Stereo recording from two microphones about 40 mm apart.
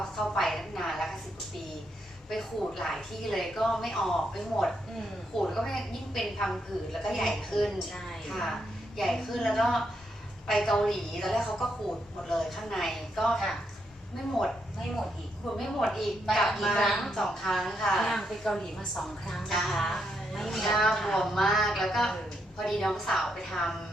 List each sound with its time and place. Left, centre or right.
0.0 s a sound: centre
2.3 s a woman's voice: centre
15.4 s a woman's voice: centre